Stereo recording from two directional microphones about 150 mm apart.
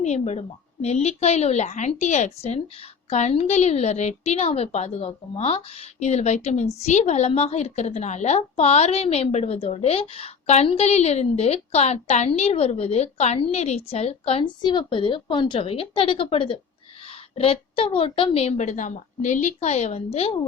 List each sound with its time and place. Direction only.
0.0 s a woman's voice: 45° left (ahead or behind)